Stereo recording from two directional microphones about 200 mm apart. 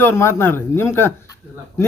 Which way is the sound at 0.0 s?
10° left (ahead or behind).